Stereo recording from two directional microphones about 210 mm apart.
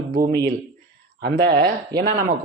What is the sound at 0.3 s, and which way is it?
Speech, 50° right (ahead or behind).